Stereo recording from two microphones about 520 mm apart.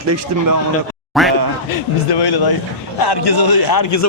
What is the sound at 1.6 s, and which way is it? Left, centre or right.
A man's voice, left.